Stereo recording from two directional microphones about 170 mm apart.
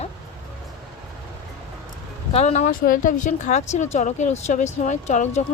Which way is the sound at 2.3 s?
40° left (ahead or behind).